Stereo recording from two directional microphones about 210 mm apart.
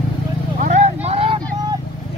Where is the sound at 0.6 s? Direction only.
30° right (ahead or behind).